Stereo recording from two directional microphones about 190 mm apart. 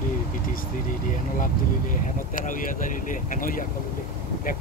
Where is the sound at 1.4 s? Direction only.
45° left (ahead or behind).